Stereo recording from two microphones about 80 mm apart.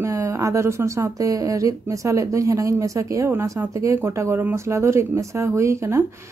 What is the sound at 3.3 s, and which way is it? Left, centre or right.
A woman's voice, right.